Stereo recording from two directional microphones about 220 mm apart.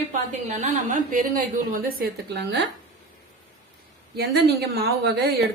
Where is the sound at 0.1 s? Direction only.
35° right (ahead or behind); by 2.6 s 50° right (ahead or behind).